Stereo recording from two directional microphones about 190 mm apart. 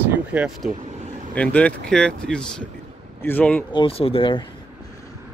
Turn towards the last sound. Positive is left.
turn(degrees=25)  # may be behind; listen again after turning